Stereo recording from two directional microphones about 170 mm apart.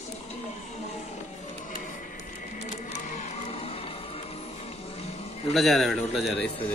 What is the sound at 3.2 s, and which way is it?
Music, 35° left (ahead or behind).